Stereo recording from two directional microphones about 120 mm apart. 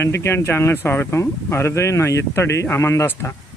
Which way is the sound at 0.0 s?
20° left (ahead or behind).